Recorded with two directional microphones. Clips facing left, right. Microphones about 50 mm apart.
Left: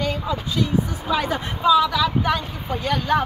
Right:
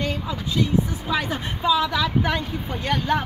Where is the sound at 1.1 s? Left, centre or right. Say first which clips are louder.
Left 3 dB; centre; by 3.0 s right.